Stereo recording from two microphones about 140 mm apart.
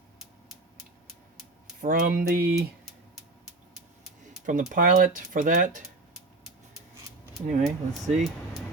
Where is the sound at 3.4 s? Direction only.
Centre (ahead or behind).